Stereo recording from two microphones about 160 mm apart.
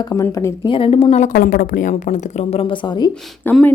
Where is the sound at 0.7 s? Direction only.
35° left (ahead or behind).